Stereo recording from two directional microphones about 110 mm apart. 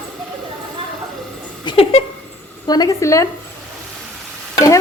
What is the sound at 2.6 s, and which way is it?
Speech, 35° left (ahead or behind).